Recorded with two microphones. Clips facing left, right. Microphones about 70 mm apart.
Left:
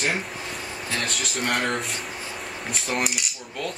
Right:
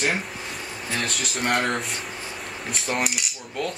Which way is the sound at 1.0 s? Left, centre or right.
Centre.